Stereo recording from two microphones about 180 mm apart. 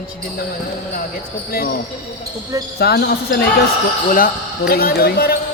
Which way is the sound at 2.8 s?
65° left (ahead or behind).